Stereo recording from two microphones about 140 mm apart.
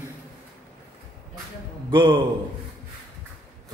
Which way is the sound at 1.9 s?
35° right (ahead or behind).